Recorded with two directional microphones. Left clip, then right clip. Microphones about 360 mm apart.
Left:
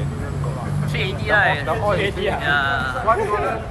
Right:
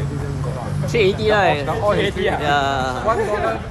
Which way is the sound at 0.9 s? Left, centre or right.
Centre.